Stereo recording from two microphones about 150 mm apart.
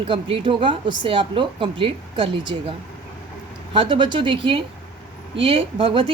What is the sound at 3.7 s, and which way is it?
A woman's voice, 35° right (ahead or behind).